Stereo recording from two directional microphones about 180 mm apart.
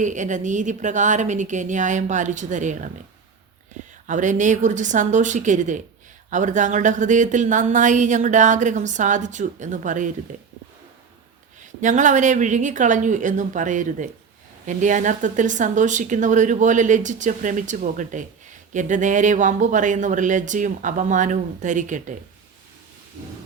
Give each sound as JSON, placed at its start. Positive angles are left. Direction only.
{"t": 0.0, "sound": "a woman's voice", "side_deg": -45}
{"t": 4.0, "sound": "a woman's voice", "side_deg": -45}
{"t": 11.8, "sound": "a woman's voice", "side_deg": -45}